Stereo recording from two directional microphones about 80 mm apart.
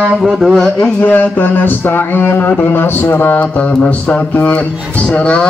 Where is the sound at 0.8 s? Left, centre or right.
Left.